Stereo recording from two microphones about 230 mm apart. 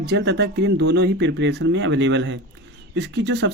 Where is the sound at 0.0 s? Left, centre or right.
Right.